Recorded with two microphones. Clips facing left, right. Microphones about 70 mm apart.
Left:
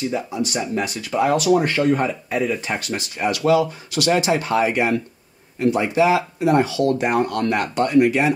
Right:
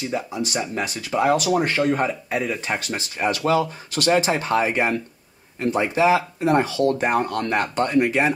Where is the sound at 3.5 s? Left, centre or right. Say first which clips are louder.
Left 6 dB; right.